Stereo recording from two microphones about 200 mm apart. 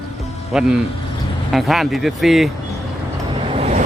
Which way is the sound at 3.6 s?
30° right (ahead or behind).